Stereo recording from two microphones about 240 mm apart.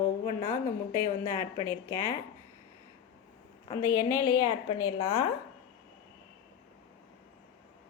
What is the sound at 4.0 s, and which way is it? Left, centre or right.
Speech, centre.